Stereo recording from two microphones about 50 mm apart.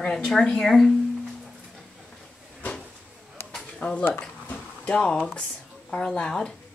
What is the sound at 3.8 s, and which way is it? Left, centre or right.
Speech, left.